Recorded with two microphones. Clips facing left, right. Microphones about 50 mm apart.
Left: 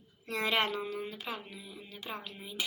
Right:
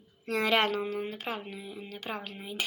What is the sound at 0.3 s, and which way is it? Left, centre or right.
A woman's voice, right.